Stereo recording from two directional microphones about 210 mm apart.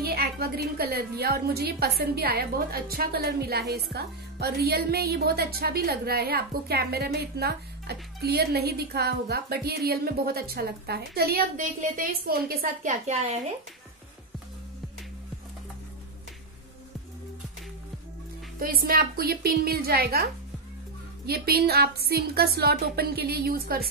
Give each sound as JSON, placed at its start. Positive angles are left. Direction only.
{"t": 0.0, "sound": "a woman's voice", "side_deg": -50}
{"t": 18.6, "sound": "a woman's voice", "side_deg": -45}
{"t": 21.3, "sound": "a woman's voice", "side_deg": -45}